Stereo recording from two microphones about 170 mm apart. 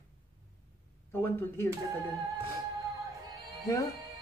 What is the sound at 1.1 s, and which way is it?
Speech, 15° left (ahead or behind).